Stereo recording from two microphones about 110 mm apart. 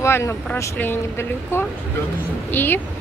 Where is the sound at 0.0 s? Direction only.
25° left (ahead or behind).